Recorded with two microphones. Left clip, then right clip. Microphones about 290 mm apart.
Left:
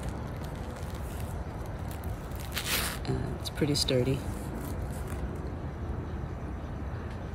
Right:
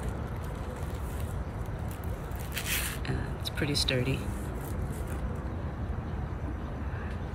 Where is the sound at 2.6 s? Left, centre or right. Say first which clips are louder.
Left 2 dB; left.